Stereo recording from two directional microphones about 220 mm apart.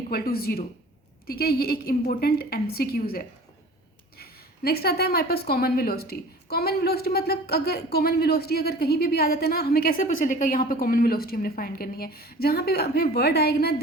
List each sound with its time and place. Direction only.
0.1 s a woman's voice: 45° left (ahead or behind)